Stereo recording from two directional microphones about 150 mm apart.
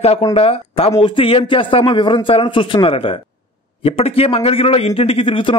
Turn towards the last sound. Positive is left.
turn(degrees=35)  # may be behind; listen again after turning